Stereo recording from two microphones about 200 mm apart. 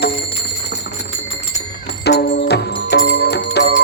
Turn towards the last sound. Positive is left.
turn(degrees=55)  # may be behind; listen again after turning